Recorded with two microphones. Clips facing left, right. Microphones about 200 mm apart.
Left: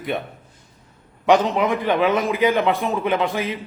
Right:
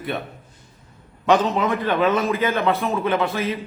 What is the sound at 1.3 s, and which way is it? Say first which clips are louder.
Speech: left 1 dB; 15° left (ahead or behind).